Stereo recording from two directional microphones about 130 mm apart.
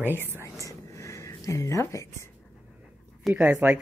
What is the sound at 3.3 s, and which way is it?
Speech, 15° right (ahead or behind).